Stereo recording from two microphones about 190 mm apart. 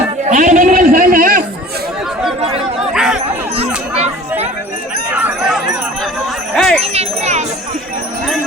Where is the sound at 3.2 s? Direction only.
35° right (ahead or behind).